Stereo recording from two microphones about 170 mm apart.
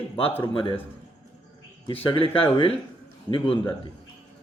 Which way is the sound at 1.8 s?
30° left (ahead or behind).